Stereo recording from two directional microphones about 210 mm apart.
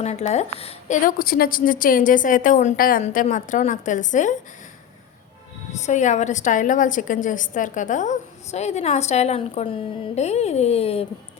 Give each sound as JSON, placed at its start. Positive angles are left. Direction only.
{"t": 0.0, "sound": "a woman's voice", "side_deg": 30}
{"t": 5.7, "sound": "a woman's voice", "side_deg": 35}